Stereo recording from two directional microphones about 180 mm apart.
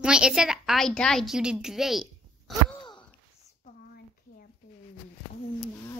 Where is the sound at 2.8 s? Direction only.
25° left (ahead or behind).